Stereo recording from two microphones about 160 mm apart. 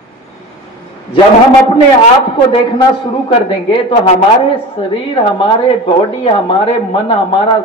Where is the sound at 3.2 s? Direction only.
30° left (ahead or behind).